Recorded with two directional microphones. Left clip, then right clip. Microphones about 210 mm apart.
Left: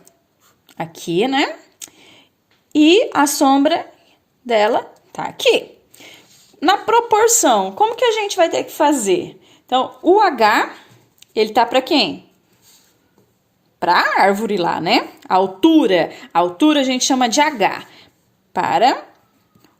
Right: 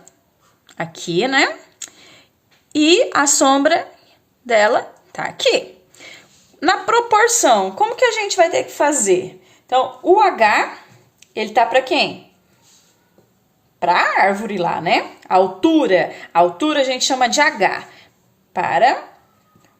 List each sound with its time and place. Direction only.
0.8 s a sound: 25° left (ahead or behind)
2.7 s a woman's voice: 25° left (ahead or behind); by 12.1 s 45° left (ahead or behind)
13.7 s speech: 45° left (ahead or behind)